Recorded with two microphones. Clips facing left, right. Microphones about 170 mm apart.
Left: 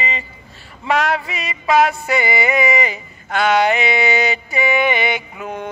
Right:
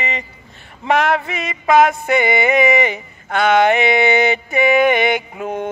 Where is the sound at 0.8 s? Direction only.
55° right (ahead or behind).